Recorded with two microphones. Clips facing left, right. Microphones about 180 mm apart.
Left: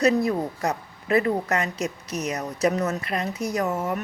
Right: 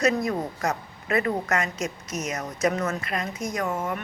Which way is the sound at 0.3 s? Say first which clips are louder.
Left 2 dB; 35° left (ahead or behind).